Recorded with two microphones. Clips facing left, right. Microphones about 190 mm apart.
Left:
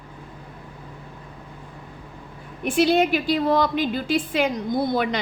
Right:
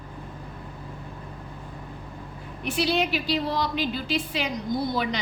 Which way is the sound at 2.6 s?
50° left (ahead or behind).